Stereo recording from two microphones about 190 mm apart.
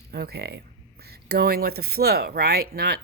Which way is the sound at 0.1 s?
55° right (ahead or behind).